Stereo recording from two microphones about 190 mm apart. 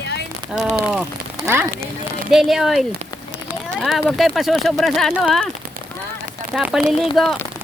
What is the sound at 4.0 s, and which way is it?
Speech, centre (ahead or behind).